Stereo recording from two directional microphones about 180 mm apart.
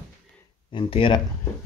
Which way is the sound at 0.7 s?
30° left (ahead or behind).